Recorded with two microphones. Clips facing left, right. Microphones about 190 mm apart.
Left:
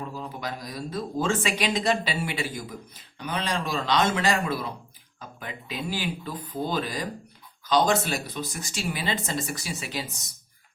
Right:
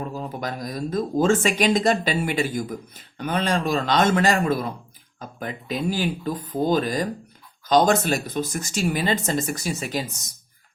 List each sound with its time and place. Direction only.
0.1 s speech: 45° right (ahead or behind)